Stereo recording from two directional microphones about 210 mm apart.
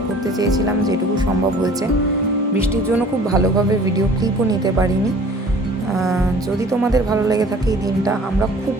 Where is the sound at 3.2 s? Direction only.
15° right (ahead or behind).